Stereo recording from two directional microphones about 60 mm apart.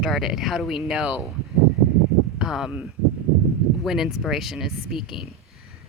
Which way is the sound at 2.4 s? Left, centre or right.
Centre.